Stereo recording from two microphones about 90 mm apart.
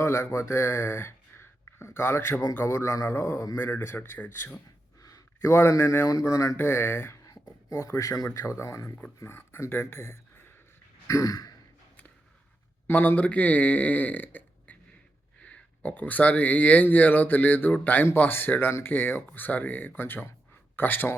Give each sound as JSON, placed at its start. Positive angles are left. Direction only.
{"t": 0.0, "sound": "speech", "side_deg": 30}
{"t": 3.6, "sound": "speech", "side_deg": 25}
{"t": 5.0, "sound": "speech", "side_deg": 40}
{"t": 7.7, "sound": "speech", "side_deg": 40}
{"t": 11.1, "sound": "sigh", "side_deg": 40}
{"t": 12.9, "sound": "speech", "side_deg": 20}